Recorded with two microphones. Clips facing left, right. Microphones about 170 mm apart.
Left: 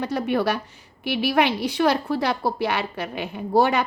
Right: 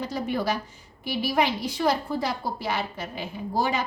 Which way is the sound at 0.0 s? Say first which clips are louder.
Left 5 dB; 65° left (ahead or behind).